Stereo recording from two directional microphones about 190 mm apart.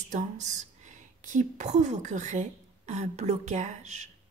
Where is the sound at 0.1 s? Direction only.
40° right (ahead or behind).